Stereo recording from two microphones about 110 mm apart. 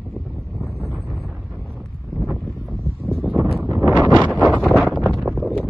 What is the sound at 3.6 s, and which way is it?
Wind, 30° right (ahead or behind).